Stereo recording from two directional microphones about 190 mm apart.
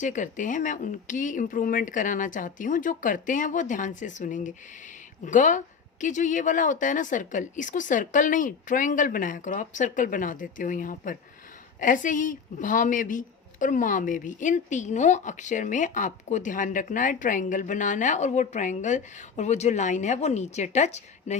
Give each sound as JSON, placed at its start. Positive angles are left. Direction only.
{"t": 0.0, "sound": "a woman's voice", "side_deg": 40}